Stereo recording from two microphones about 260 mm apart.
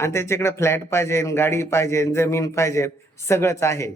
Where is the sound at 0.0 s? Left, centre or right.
Centre.